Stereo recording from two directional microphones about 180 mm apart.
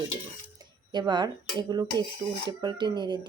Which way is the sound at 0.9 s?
25° right (ahead or behind).